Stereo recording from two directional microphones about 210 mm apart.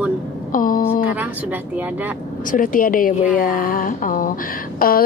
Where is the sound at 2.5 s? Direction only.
40° left (ahead or behind).